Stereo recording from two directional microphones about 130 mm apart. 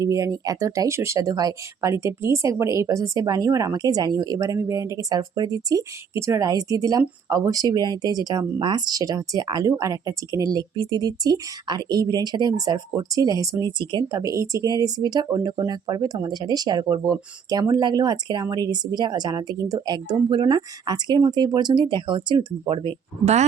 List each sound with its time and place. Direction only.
0.0 s speech: 25° right (ahead or behind)